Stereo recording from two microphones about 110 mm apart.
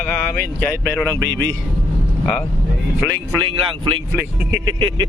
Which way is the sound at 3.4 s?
50° right (ahead or behind).